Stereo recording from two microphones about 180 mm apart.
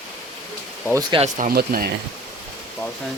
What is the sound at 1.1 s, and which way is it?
Speech, 25° right (ahead or behind).